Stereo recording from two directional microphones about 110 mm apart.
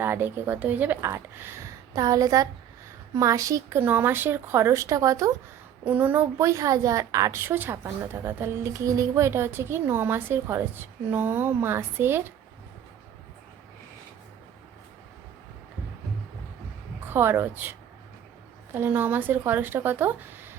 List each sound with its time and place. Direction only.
0.0 s a woman's voice: 20° right (ahead or behind)
5.8 s a woman's voice: 15° right (ahead or behind)
6.4 s a woman's voice: 30° right (ahead or behind)
17.1 s a woman's voice: 20° right (ahead or behind)